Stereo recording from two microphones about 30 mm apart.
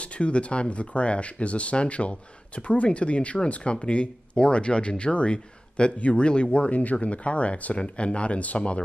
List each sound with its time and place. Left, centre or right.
0.0 s speech: left
3.7 s speech: left
5.9 s speech: left
6.2 s speech: left
6.8 s speech: left